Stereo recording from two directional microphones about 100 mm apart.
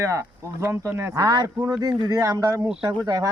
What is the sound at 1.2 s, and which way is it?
Speech, 45° right (ahead or behind).